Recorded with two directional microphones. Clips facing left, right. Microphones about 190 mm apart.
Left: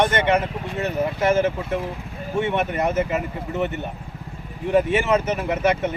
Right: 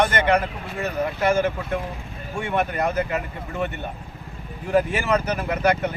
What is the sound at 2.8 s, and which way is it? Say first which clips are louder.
Speech: left 2 dB; 20° left (ahead or behind).